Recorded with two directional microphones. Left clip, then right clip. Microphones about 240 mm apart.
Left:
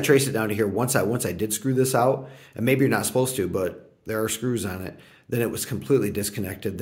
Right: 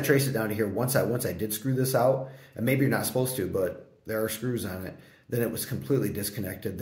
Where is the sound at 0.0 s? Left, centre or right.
Left.